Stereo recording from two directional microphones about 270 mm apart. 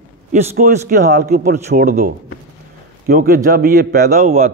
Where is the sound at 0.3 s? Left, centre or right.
Right.